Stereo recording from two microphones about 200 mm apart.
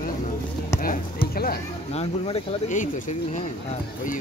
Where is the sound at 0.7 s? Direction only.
45° left (ahead or behind).